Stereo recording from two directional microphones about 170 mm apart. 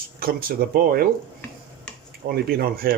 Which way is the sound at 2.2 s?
65° right (ahead or behind).